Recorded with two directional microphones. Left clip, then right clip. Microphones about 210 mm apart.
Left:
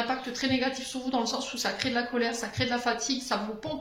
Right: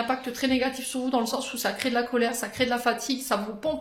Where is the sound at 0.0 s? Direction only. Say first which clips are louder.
Right 3 dB; 55° right (ahead or behind).